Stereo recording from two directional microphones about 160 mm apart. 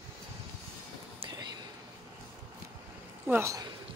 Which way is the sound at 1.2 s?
30° right (ahead or behind).